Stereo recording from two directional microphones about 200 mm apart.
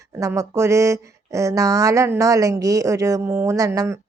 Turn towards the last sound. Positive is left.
turn(degrees=-15)  # may be behind; listen again after turning